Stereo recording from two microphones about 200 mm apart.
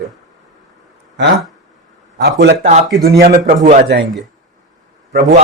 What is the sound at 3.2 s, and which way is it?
Speech, 40° right (ahead or behind).